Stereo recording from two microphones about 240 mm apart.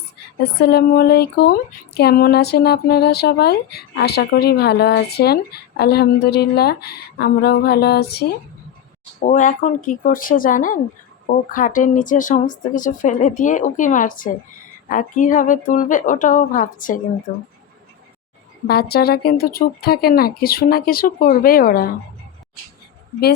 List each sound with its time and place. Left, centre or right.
0.6 s speech: left
9.2 s speech: left
18.7 s speech: left